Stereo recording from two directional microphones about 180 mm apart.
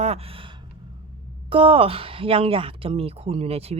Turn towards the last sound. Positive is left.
turn(degrees=-35)  # may be behind; listen again after turning